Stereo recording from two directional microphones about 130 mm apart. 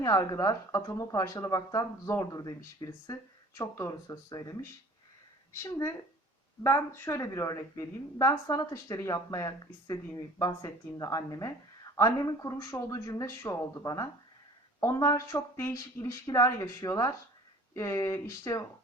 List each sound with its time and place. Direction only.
0.0 s a woman's voice: 25° left (ahead or behind)
5.5 s a woman's voice: 20° left (ahead or behind)